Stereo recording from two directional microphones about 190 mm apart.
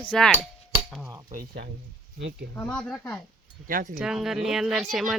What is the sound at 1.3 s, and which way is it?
Speech, 50° right (ahead or behind).